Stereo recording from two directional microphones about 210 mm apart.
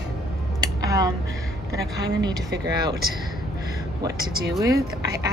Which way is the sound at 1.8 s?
55° right (ahead or behind).